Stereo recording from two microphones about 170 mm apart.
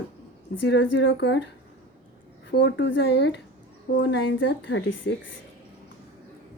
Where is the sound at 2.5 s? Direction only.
90° left.